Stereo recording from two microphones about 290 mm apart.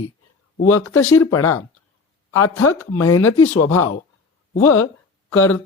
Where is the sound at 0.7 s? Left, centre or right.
Left.